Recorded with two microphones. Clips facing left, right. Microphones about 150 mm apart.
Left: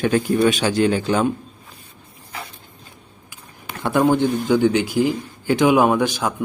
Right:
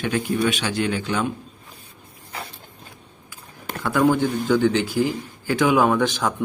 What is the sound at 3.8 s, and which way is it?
Speech, 25° left (ahead or behind).